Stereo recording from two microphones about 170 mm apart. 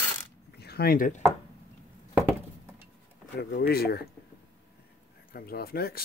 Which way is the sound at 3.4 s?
70° left (ahead or behind).